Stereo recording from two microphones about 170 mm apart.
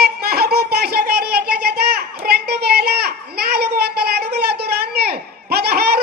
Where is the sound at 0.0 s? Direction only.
70° right (ahead or behind).